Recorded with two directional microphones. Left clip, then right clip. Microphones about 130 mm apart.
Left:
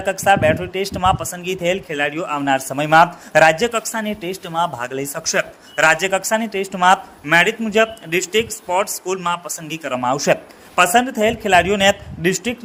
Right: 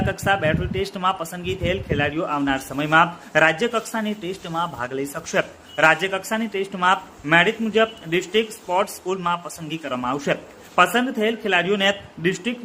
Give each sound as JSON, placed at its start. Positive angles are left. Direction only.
{"t": 0.0, "sound": "speech", "side_deg": 25}